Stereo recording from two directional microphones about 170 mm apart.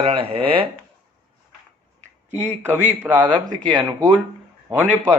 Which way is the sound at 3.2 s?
25° right (ahead or behind).